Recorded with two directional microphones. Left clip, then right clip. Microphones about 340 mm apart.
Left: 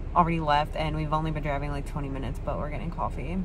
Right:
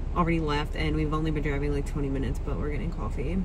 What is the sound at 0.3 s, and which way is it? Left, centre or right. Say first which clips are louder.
Speech: left 4 dB; centre.